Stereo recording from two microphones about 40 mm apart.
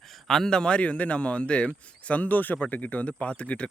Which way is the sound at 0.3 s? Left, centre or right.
Centre.